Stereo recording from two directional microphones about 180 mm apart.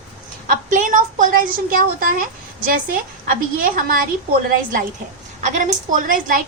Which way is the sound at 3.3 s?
50° right (ahead or behind).